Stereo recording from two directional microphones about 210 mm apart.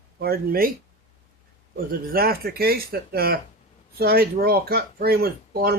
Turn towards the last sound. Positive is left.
turn(degrees=-45)  # may be behind; listen again after turning